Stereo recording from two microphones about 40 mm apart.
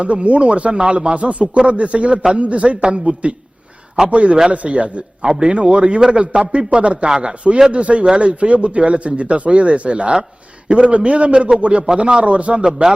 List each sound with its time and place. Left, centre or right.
0.0 s a man's voice: right